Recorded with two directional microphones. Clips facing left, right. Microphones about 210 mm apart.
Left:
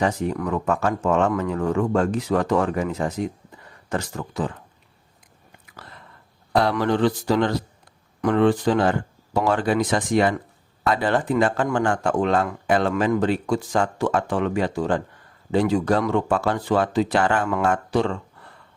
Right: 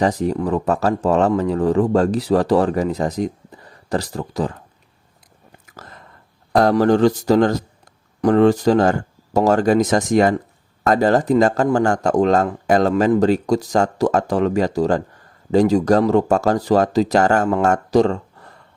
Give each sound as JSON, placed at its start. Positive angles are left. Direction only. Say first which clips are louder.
{"t": 0.0, "sound": "speech", "louder": "right 4 dB", "side_deg": -35}
{"t": 5.5, "sound": "whispering", "louder": "right 4 dB", "side_deg": -45}
{"t": 6.5, "sound": "speech", "louder": "right 6 dB", "side_deg": -45}